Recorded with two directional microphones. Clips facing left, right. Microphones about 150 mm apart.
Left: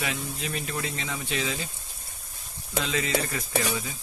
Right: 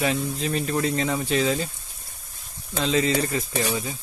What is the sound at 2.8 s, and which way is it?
Speech, 35° right (ahead or behind).